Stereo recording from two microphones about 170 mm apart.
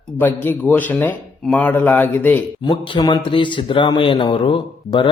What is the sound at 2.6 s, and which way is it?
Speech, 25° left (ahead or behind).